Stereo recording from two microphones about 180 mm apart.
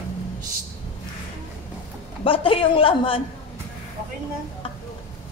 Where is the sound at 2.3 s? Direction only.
30° left (ahead or behind).